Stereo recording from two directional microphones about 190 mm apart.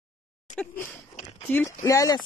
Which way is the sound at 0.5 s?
40° left (ahead or behind).